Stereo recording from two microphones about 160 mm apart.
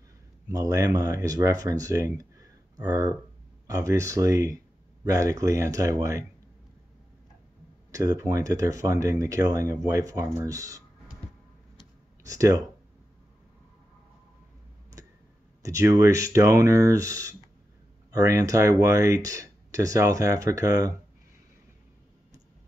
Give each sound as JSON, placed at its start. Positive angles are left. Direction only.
{"t": 0.5, "sound": "speech", "side_deg": -20}
{"t": 7.9, "sound": "speech", "side_deg": -20}
{"t": 12.3, "sound": "speech", "side_deg": -20}
{"t": 15.6, "sound": "speech", "side_deg": -20}